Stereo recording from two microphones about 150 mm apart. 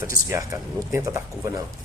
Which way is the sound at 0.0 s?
20° right (ahead or behind).